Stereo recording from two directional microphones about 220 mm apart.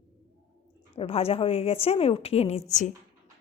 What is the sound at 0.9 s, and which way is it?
A woman's voice, 25° left (ahead or behind).